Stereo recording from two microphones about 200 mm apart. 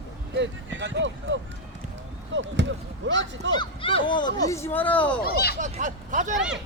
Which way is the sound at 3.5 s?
25° left (ahead or behind).